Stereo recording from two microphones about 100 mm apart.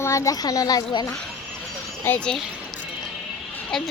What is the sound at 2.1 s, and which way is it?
Speech, 25° left (ahead or behind).